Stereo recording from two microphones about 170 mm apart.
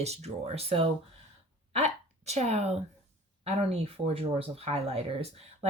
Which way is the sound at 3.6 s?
35° right (ahead or behind).